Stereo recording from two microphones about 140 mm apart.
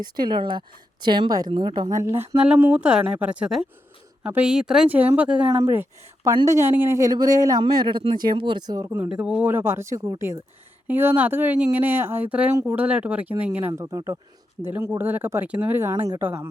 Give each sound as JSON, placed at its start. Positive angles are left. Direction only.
{"t": 0.0, "sound": "a woman's voice", "side_deg": -30}
{"t": 9.0, "sound": "a woman's voice", "side_deg": -5}